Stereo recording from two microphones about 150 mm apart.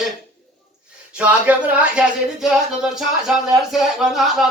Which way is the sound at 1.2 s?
10° right (ahead or behind).